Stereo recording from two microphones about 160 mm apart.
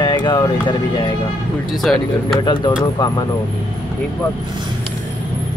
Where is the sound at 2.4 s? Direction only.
30° left (ahead or behind).